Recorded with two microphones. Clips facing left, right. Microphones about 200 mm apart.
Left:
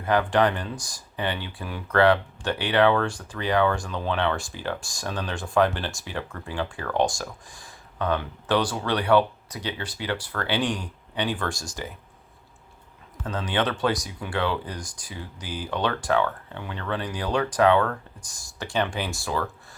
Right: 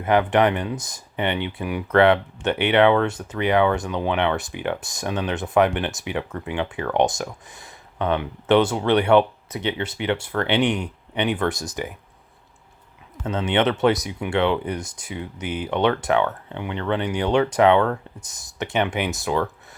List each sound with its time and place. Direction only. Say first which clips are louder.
0.0 s speech: right 3 dB; 20° right (ahead or behind)
13.2 s speech: right 5 dB; 25° right (ahead or behind)